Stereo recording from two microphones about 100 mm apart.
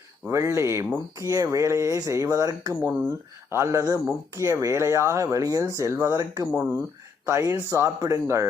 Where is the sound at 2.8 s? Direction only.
25° right (ahead or behind).